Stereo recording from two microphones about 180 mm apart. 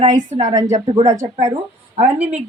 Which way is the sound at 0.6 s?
40° right (ahead or behind).